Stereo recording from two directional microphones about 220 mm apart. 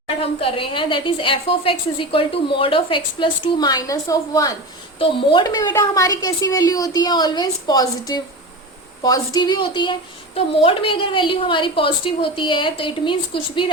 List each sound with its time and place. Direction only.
0.2 s a woman's voice: 25° left (ahead or behind)